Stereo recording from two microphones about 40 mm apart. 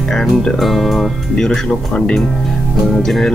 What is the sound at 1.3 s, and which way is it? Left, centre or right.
Speech, centre.